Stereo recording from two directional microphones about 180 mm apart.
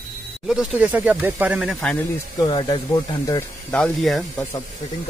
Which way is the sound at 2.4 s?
25° left (ahead or behind).